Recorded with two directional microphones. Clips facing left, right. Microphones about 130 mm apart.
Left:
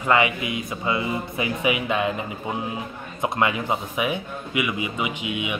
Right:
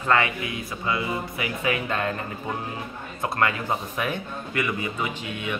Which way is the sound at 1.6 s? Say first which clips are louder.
Left 3 dB; 15° left (ahead or behind).